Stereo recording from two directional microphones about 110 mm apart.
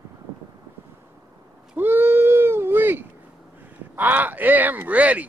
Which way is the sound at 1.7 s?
20° right (ahead or behind).